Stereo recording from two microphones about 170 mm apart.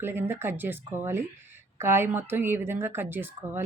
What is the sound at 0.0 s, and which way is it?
Speech, 15° right (ahead or behind).